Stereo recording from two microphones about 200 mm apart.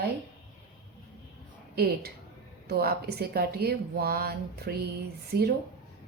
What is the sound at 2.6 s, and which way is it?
A woman's voice, 50° right (ahead or behind).